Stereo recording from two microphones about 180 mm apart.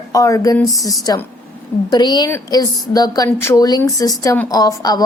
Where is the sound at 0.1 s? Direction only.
20° left (ahead or behind).